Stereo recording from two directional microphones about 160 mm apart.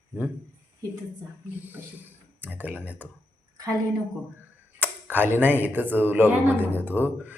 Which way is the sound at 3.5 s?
20° right (ahead or behind).